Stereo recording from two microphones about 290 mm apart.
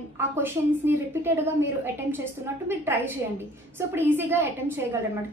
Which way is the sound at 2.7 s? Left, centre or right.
Centre.